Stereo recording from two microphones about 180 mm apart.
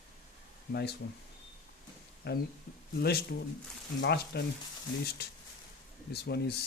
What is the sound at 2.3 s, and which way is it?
Speech, 65° left (ahead or behind).